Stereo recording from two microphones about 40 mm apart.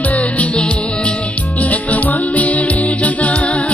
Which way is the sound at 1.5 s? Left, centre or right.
Left.